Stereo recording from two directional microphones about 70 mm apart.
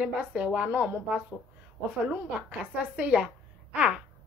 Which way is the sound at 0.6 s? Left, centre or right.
Right.